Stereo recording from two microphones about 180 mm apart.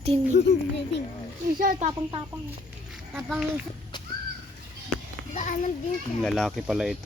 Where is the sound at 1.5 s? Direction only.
50° right (ahead or behind).